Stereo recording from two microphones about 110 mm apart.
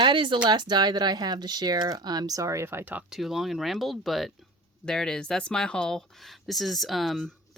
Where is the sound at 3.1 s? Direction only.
5° right (ahead or behind).